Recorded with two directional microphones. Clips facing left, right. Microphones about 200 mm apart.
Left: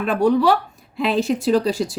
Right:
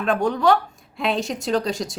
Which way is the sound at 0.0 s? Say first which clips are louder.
Left 3 dB; 5° left (ahead or behind).